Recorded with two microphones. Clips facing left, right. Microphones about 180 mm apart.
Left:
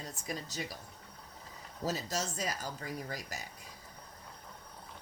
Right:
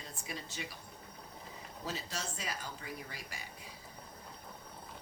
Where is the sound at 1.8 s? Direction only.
40° left (ahead or behind).